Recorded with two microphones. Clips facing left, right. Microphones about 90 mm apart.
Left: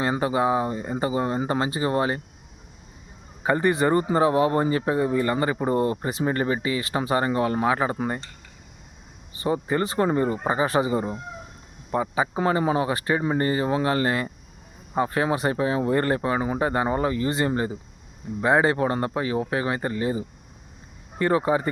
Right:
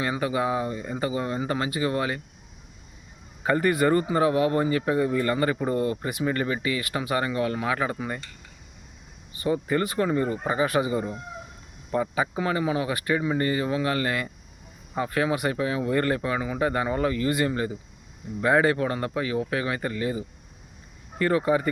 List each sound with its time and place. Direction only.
0.0 s speech: 30° left (ahead or behind)
3.4 s speech: 25° left (ahead or behind)
9.3 s speech: 30° left (ahead or behind)
12.4 s speech: 35° left (ahead or behind)